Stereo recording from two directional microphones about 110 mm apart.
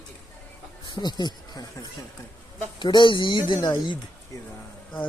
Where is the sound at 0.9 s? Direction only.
40° left (ahead or behind).